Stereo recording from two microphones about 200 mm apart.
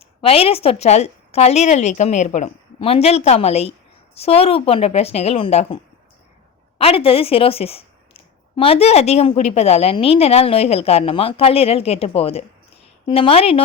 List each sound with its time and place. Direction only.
0.0 s a woman's voice: 30° left (ahead or behind)